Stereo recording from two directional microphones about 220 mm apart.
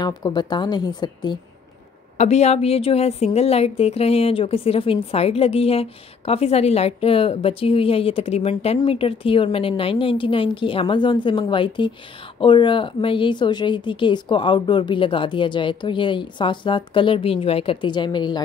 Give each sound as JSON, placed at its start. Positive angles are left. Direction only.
{"t": 0.0, "sound": "a woman's voice", "side_deg": 20}
{"t": 2.1, "sound": "a woman's voice", "side_deg": 30}